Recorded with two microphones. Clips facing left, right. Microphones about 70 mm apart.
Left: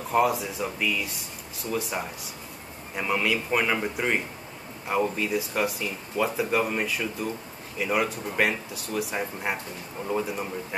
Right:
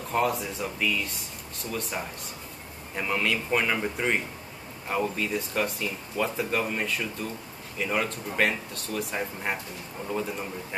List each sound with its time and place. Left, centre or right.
0.1 s speech: centre